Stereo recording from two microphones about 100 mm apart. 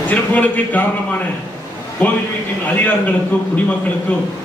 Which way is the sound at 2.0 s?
15° left (ahead or behind).